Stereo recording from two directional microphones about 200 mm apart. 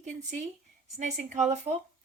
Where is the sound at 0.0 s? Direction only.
35° right (ahead or behind).